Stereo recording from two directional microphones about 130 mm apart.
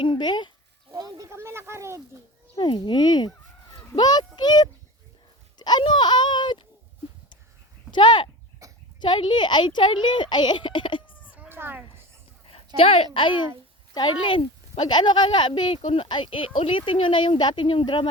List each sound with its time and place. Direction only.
0.0 s speech: 35° left (ahead or behind)
0.9 s speech: 30° right (ahead or behind)
2.6 s speech: 40° left (ahead or behind)
7.9 s speech: 35° left (ahead or behind)
8.6 s a sound: 25° right (ahead or behind)
9.0 s speech: 35° left (ahead or behind)
11.3 s a sound: 15° right (ahead or behind)
12.5 s a sound: 50° left (ahead or behind)
13.1 s speech: 40° left (ahead or behind)